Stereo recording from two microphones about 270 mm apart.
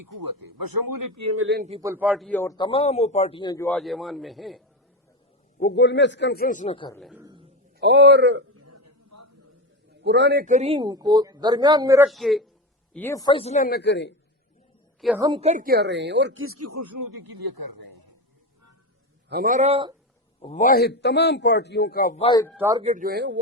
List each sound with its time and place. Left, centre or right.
1.0 s a man's voice: right
1.4 s speech: right
1.8 s a man's voice: centre
5.5 s a man's voice: left; by 7.0 s centre
7.0 s a man's voice: centre
7.8 s speech: right
8.6 s a sound: right
10.0 s a man's voice: right; by 12.0 s centre
12.0 s a man's voice: centre; by 14.1 s left
15.2 s speech: centre; by 17.0 s right
19.3 s a man's voice: right
20.4 s a man's voice: left
22.5 s a man's voice: centre
22.8 s speech: right